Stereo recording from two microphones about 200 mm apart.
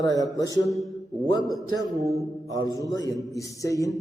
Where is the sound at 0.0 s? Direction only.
15° left (ahead or behind).